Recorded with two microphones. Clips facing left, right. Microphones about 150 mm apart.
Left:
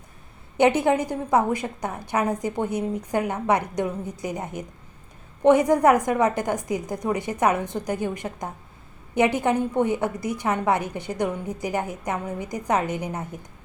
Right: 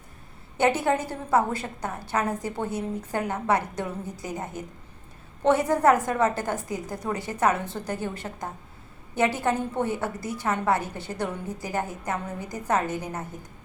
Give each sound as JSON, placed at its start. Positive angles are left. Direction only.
{"t": 0.5, "sound": "a woman's voice", "side_deg": 20}